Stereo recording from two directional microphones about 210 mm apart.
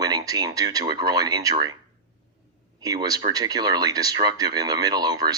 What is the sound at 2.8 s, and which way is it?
Speech, 15° right (ahead or behind).